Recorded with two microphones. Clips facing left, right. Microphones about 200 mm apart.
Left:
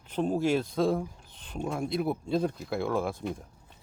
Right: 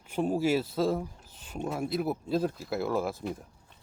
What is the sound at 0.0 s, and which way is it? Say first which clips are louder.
Speech: even; 10° right (ahead or behind).